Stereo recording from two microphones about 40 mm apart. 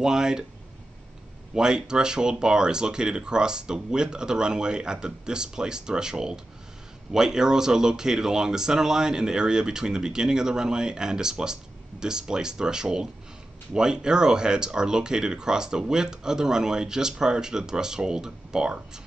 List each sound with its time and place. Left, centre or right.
0.0 s speech: centre
1.5 s speech: centre